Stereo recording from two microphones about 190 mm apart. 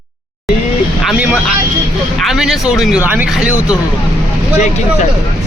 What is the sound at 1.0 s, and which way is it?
Speech, 10° right (ahead or behind).